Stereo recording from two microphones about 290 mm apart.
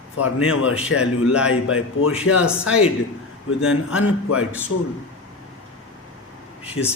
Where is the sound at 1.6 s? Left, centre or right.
Left.